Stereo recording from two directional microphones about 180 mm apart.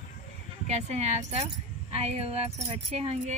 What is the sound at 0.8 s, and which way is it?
A woman's voice, 40° right (ahead or behind).